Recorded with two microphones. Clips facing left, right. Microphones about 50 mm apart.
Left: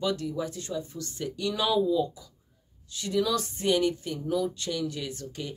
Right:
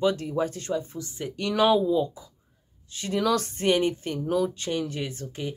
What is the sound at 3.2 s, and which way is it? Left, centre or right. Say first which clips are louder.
Speech: right 4 dB; right.